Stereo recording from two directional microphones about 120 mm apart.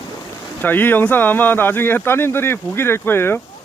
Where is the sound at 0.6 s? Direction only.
15° left (ahead or behind).